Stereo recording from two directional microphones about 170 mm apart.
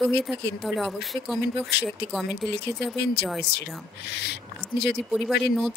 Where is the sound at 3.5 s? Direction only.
80° left.